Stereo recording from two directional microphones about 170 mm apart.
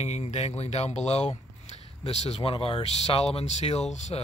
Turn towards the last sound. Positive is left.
turn(degrees=45)  # may be behind; listen again after turning